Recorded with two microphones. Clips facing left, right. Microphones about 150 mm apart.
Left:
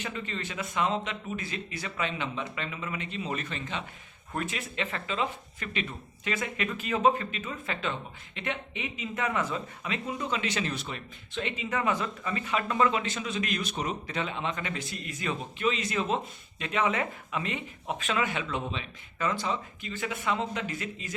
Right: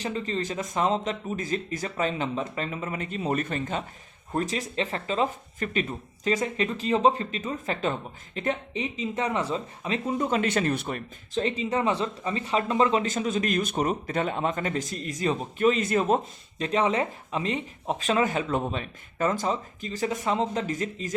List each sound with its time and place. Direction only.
0.0 s speech: 35° right (ahead or behind)
4.3 s speech: 35° right (ahead or behind)